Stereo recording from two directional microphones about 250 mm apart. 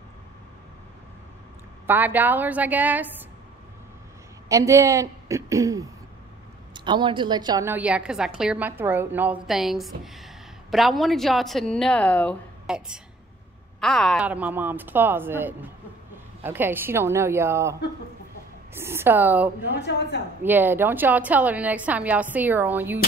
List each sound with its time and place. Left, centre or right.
1.9 s a woman's voice: centre
4.5 s a woman's voice: centre
19.7 s a woman's voice: left
20.4 s a woman's voice: centre